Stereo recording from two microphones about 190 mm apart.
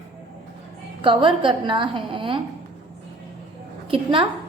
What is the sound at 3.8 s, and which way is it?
Speech, 30° right (ahead or behind).